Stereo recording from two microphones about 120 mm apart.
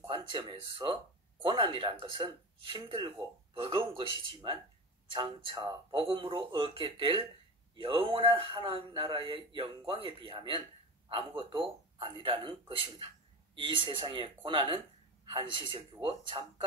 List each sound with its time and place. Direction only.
0.1 s a man's voice: 45° right (ahead or behind)